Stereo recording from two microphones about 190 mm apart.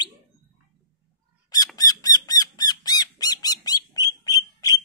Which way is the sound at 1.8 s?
20° left (ahead or behind).